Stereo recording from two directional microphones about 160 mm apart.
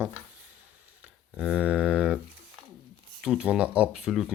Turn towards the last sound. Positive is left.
turn(degrees=-5)  # may be behind; listen again after turning